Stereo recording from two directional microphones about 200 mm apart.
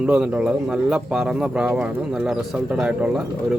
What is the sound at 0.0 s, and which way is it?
A man's voice, 5° right (ahead or behind).